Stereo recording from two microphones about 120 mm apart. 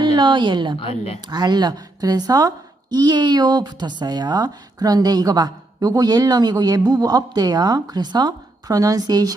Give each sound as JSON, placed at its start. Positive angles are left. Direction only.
{"t": 0.0, "sound": "a woman's voice", "side_deg": -40}